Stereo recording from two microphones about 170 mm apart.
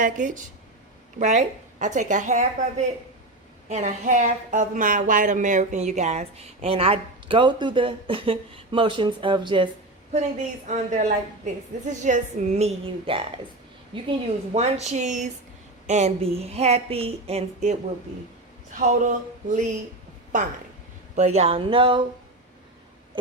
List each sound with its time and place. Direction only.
0.0 s a woman's voice: 50° right (ahead or behind); by 9.6 s 25° right (ahead or behind)
10.7 s a woman's voice: 45° right (ahead or behind); by 14.1 s 30° right (ahead or behind)
14.5 s a woman's voice: 40° right (ahead or behind)